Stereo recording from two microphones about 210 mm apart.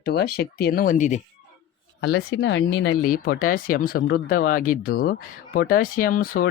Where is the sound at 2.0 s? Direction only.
55° left (ahead or behind).